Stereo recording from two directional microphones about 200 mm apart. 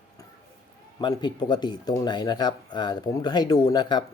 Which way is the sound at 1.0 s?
20° left (ahead or behind).